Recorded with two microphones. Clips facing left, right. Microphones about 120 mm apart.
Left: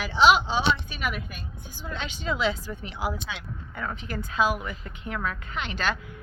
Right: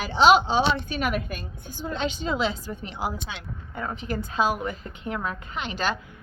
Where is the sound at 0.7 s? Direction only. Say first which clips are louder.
Right 5 dB; 50° right (ahead or behind).